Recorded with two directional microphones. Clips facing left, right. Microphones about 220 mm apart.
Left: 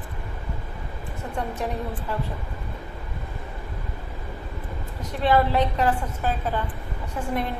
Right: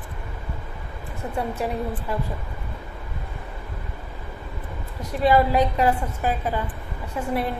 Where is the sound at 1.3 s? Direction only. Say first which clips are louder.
Right 3 dB; 10° right (ahead or behind).